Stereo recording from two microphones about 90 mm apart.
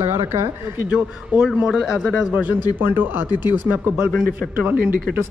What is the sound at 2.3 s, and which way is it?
Speech, 20° right (ahead or behind).